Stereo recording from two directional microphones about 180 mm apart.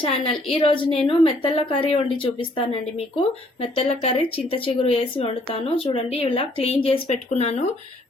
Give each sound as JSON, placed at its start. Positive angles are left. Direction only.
{"t": 0.0, "sound": "speech", "side_deg": 30}